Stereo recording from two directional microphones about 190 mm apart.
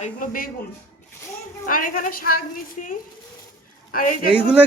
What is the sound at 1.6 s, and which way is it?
A woman's voice, 45° left (ahead or behind).